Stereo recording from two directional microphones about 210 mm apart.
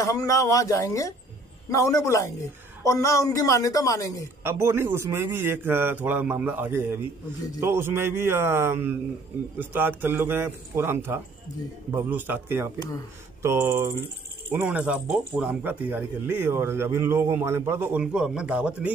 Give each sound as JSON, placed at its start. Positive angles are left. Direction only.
{"t": 0.0, "sound": "a woman's voice", "side_deg": 15}
{"t": 4.4, "sound": "speech", "side_deg": -10}
{"t": 12.7, "sound": "a woman's voice", "side_deg": 15}
{"t": 13.4, "sound": "speech", "side_deg": -10}